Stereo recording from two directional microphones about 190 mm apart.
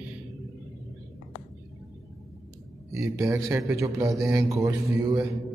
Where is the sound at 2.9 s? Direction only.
15° right (ahead or behind).